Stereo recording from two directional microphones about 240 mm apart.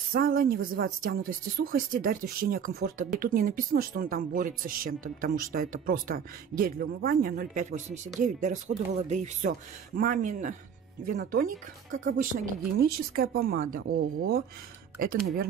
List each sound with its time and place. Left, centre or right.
0.1 s speech: right